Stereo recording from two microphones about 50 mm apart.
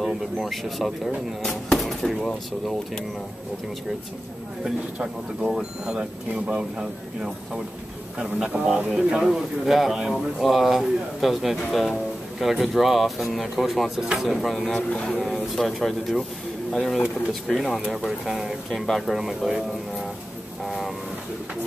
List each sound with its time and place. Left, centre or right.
0.0 s speech: centre
5.5 s speech: centre
14.9 s speech: left
15.5 s speech: centre
20.6 s train: centre